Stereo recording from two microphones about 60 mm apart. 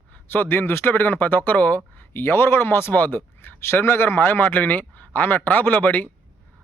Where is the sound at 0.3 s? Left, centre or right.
Left.